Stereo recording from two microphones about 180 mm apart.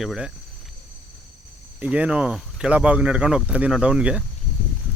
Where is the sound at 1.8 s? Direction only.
5° right (ahead or behind).